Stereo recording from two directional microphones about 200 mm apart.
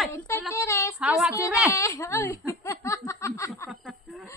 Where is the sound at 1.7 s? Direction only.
15° left (ahead or behind).